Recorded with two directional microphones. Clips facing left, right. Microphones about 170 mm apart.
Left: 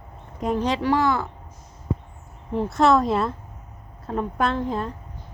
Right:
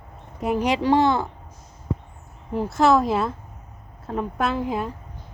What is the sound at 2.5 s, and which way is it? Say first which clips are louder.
A woman's voice: even; centre (ahead or behind).